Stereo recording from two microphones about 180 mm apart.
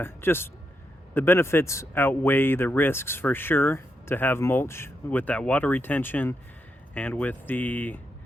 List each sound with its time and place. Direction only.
0.0 s speech: 15° left (ahead or behind)